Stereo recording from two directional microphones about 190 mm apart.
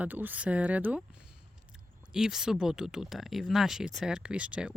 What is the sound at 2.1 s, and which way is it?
Speech, centre (ahead or behind).